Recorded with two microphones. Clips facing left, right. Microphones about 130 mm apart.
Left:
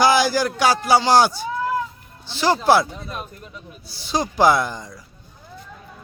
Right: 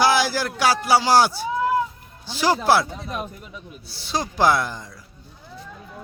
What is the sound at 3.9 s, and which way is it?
Speech, centre (ahead or behind).